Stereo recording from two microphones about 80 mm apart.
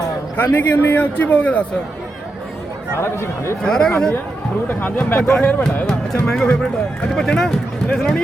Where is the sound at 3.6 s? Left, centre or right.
Centre.